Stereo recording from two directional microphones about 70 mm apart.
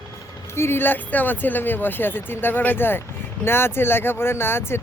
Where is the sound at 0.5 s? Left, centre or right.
Left.